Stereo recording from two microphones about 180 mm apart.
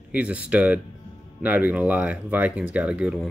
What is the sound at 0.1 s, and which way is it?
Speech, 5° right (ahead or behind).